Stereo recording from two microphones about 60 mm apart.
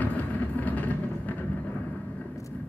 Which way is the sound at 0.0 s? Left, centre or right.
Left.